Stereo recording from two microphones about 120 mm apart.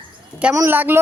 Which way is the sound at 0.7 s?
15° right (ahead or behind).